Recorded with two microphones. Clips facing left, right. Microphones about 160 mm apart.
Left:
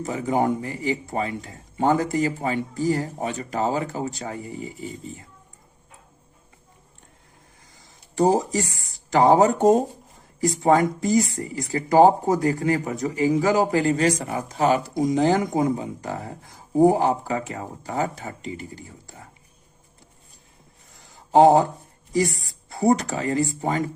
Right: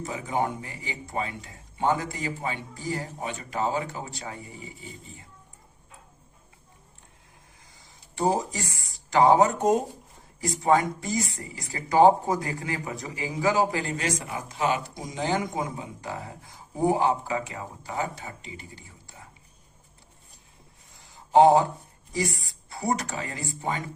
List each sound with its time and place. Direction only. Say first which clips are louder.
0.0 s speech: left 6 dB; 40° left (ahead or behind)
8.1 s speech: left 6 dB; 40° left (ahead or behind)
16.8 s speech: left 5 dB; 40° left (ahead or behind)
21.3 s speech: left 3 dB; 40° left (ahead or behind)
22.8 s speech: left 8 dB; 35° left (ahead or behind)